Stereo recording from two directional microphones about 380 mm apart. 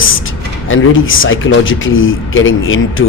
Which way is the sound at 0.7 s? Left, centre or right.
Left.